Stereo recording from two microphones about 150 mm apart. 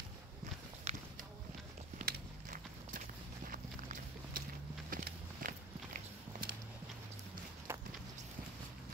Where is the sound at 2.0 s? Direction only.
60° right (ahead or behind).